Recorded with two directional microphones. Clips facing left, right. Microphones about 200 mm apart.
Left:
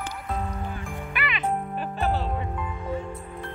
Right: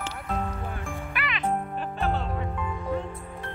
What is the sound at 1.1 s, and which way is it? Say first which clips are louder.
Music: left 1 dB; centre (ahead or behind).